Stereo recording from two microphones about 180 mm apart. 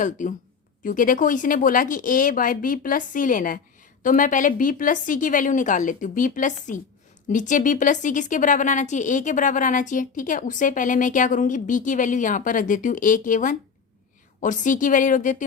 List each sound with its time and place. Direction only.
0.0 s speech: 45° left (ahead or behind)